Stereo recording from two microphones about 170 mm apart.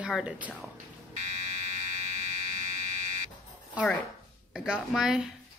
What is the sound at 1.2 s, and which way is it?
Fire alarm, 45° right (ahead or behind).